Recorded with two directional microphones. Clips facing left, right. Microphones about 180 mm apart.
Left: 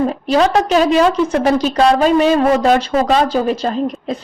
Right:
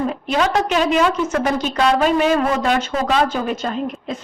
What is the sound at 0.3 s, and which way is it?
A woman's voice, 35° left (ahead or behind).